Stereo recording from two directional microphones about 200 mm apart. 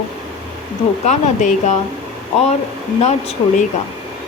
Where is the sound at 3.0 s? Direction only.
35° left (ahead or behind).